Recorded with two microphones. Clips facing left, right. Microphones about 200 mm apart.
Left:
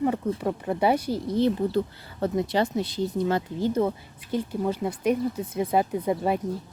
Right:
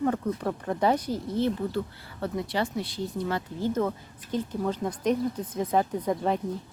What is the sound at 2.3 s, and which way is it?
Speech, 20° left (ahead or behind).